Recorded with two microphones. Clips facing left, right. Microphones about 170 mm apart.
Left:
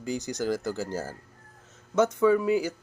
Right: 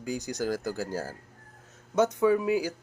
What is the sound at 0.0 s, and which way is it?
A man's voice, 15° right (ahead or behind).